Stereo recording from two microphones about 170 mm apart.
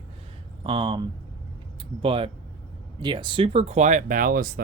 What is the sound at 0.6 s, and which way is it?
Speech, 30° right (ahead or behind).